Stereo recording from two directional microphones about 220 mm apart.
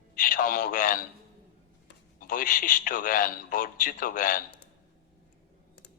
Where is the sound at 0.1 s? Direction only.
40° left (ahead or behind).